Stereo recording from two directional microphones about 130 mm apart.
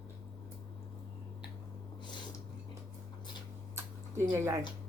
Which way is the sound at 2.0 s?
35° left (ahead or behind).